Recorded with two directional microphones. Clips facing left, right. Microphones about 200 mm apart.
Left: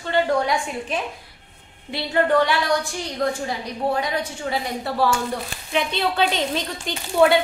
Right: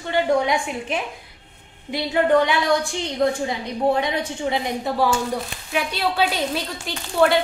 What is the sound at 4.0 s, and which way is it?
Speech, 25° right (ahead or behind).